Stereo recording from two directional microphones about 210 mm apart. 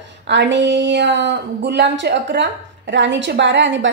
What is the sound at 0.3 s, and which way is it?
A woman's voice, 60° right (ahead or behind).